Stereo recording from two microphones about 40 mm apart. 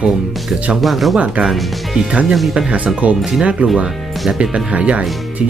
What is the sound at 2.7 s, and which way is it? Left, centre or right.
Speech, right.